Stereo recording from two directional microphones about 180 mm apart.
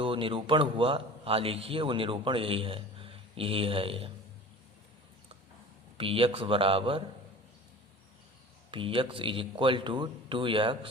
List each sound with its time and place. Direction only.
0.0 s a man's voice: 30° right (ahead or behind)
6.0 s a man's voice: 30° right (ahead or behind)
8.7 s a man's voice: 30° right (ahead or behind)